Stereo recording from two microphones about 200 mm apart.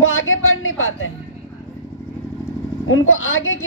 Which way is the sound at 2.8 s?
80° left.